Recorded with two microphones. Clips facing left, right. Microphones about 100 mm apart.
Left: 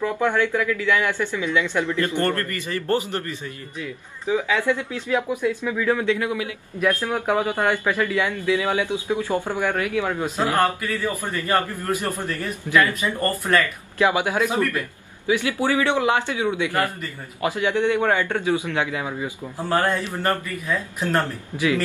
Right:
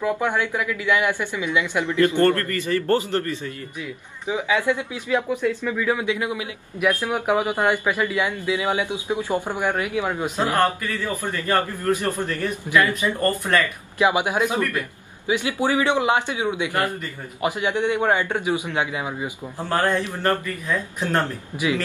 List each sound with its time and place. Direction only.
0.0 s speech: 15° right (ahead or behind)
2.1 s a man's voice: 20° left (ahead or behind)
4.3 s speech: 15° right (ahead or behind)
5.3 s a man's voice: 15° left (ahead or behind)
5.8 s speech: 5° right (ahead or behind)
6.0 s speech: 20° right (ahead or behind)
11.4 s a man's voice: 15° left (ahead or behind)
12.1 s speech: 15° right (ahead or behind)
13.2 s speech: 5° left (ahead or behind)
13.9 s a man's voice: 15° right (ahead or behind)
20.0 s a man's voice: 10° left (ahead or behind)